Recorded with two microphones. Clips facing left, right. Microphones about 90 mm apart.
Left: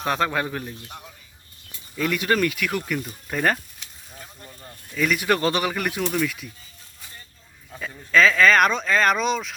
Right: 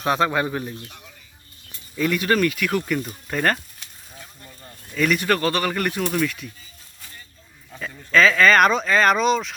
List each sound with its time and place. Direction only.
0.0 s speech: 5° right (ahead or behind)
2.0 s speech: 5° left (ahead or behind)
4.4 s a sound: 15° left (ahead or behind)
4.9 s speech: 5° left (ahead or behind)
5.4 s speech: 20° left (ahead or behind)
5.7 s speech: 5° left (ahead or behind)
7.7 s speech: centre (ahead or behind)